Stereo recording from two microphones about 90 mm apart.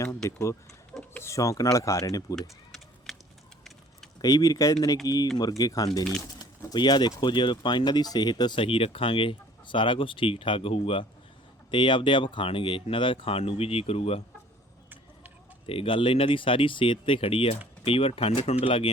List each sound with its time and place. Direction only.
0.3 s speech: 35° left (ahead or behind)
3.1 s a sound: centre (ahead or behind)
4.2 s speech: 45° left (ahead or behind)
6.7 s speech: 55° left (ahead or behind); by 11.0 s 90° left
11.7 s speech: 65° left (ahead or behind); by 14.2 s 90° left
15.6 s speech: 85° left